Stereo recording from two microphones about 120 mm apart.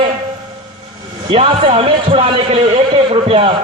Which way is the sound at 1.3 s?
50° right (ahead or behind).